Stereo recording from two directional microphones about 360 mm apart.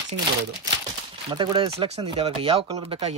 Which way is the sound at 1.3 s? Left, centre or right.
Centre.